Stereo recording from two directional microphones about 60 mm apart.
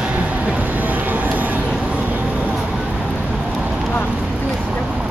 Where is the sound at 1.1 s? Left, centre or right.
Right.